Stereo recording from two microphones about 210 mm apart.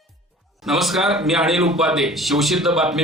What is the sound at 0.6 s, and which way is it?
A man's voice, centre (ahead or behind).